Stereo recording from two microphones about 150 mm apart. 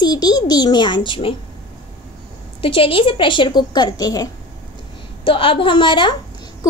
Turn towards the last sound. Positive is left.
turn(degrees=25)  # may be behind; listen again after turning